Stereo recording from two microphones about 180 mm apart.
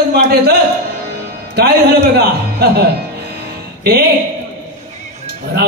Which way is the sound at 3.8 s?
60° right (ahead or behind).